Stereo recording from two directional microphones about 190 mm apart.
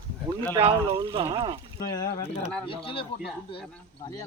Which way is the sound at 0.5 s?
25° right (ahead or behind).